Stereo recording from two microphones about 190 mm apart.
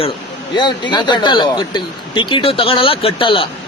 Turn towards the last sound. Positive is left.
turn(degrees=30)  # may be behind; listen again after turning